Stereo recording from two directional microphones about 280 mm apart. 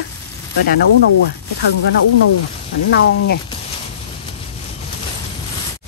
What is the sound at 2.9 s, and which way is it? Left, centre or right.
Speech, left.